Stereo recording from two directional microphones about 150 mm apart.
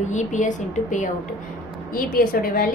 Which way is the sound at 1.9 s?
70° left (ahead or behind).